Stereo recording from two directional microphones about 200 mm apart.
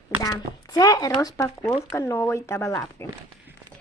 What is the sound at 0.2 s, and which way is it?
Speech, 15° left (ahead or behind).